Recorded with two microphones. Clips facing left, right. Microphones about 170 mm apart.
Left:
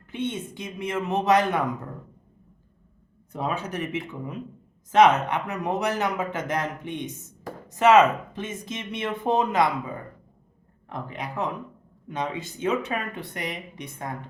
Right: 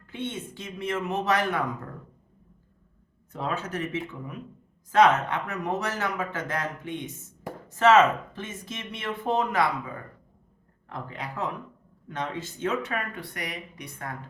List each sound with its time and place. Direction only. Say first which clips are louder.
0.1 s speech: left 4 dB; 20° left (ahead or behind)
3.3 s speech: left 2 dB; 15° left (ahead or behind)